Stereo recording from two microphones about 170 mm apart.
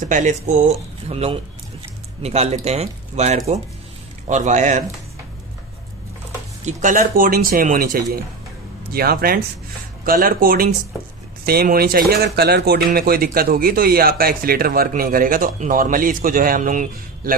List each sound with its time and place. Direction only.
0.0 s speech: 45° right (ahead or behind)
6.6 s speech: 50° right (ahead or behind)